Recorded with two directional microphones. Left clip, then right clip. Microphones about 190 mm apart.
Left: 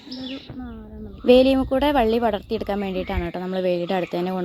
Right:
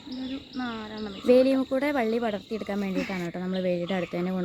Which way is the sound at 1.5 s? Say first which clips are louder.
Left 6 dB; 5° left (ahead or behind).